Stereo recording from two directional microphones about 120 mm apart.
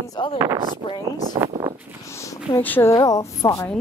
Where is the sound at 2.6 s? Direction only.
15° left (ahead or behind).